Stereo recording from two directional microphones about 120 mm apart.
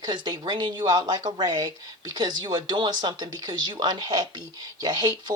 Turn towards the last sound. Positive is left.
turn(degrees=-35)  # may be behind; listen again after turning